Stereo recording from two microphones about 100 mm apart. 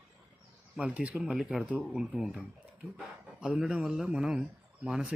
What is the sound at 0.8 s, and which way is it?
Speech, 10° right (ahead or behind).